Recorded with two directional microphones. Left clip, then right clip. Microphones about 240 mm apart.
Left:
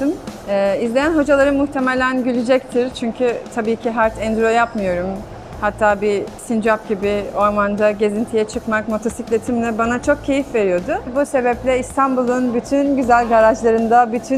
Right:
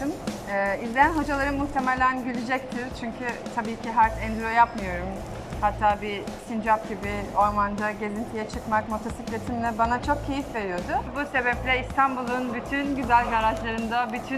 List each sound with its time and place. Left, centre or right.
0.5 s speech: left